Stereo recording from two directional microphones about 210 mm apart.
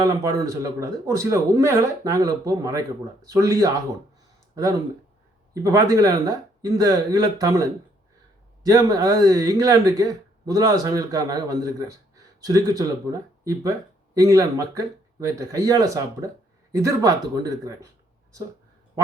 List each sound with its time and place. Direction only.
0.0 s speech: 15° right (ahead or behind)